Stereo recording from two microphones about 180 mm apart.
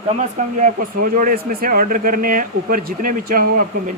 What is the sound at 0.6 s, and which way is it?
Speech, 50° right (ahead or behind).